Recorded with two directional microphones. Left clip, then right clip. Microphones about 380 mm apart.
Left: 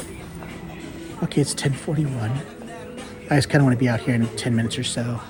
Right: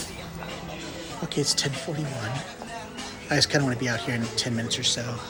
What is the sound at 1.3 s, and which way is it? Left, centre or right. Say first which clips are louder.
Speech: left 1 dB; centre.